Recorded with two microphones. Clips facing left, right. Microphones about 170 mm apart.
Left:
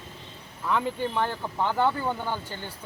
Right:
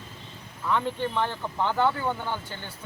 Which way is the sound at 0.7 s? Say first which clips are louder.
Even; 10° left (ahead or behind).